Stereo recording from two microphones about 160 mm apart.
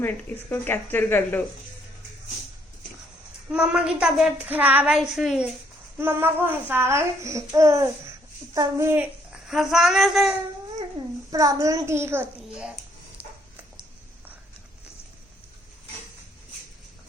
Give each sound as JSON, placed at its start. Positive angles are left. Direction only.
{"t": 0.5, "sound": "speech", "side_deg": 15}
{"t": 3.5, "sound": "speech", "side_deg": -5}
{"t": 4.9, "sound": "child singing", "side_deg": 0}
{"t": 6.0, "sound": "speech", "side_deg": -15}
{"t": 9.5, "sound": "child singing", "side_deg": 0}
{"t": 11.3, "sound": "speech", "side_deg": -20}